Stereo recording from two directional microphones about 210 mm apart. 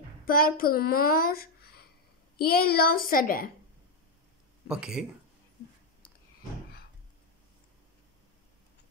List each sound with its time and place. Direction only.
0.2 s a woman's voice: 45° left (ahead or behind)
4.6 s speech: 5° right (ahead or behind)